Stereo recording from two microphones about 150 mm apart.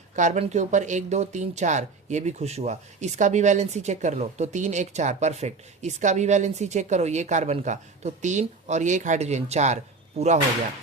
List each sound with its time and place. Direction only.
0.2 s speech: 50° right (ahead or behind)